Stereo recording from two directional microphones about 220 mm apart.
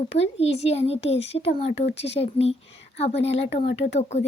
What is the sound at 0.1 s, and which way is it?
Speech, 25° left (ahead or behind).